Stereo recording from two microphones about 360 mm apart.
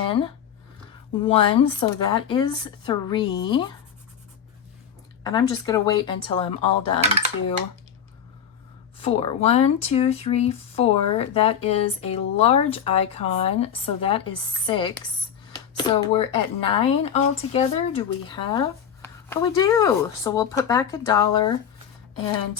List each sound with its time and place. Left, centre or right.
1.2 s speech: centre
5.2 s speech: centre
9.0 s speech: centre